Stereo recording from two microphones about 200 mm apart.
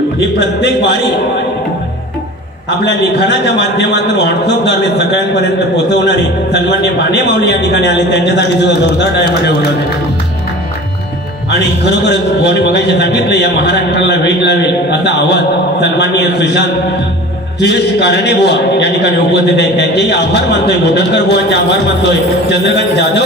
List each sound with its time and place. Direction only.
0.4 s a man's voice: 60° left (ahead or behind)
2.8 s a man's voice: 60° left (ahead or behind)
11.6 s a man's voice: 60° left (ahead or behind)